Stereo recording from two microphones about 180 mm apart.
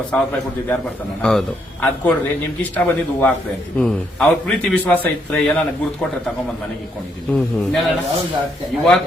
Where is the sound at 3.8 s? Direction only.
5° left (ahead or behind).